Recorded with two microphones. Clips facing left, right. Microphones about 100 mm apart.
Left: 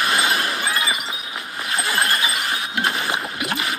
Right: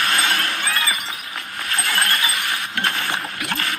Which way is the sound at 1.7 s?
30° left (ahead or behind).